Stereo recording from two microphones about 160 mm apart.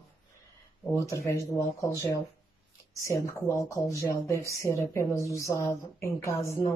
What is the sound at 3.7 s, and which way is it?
A woman's voice, 20° left (ahead or behind).